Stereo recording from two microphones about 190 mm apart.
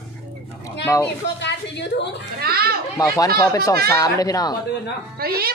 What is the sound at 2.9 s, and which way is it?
Speech, 20° left (ahead or behind).